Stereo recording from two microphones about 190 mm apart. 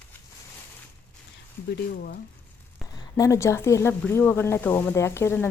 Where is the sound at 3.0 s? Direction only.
15° left (ahead or behind).